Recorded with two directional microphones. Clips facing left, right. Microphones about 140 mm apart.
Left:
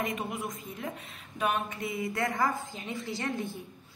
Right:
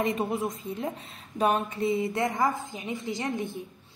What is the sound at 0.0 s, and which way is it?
A woman's voice, 30° right (ahead or behind).